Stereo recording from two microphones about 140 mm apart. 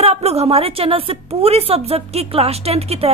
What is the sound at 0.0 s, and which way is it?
A woman's voice, 45° right (ahead or behind).